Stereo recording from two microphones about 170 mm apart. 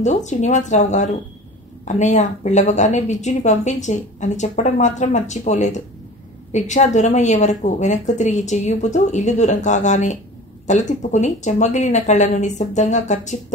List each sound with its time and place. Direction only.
0.0 s a woman's voice: 45° left (ahead or behind)